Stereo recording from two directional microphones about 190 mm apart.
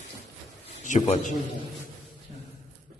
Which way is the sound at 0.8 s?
40° left (ahead or behind).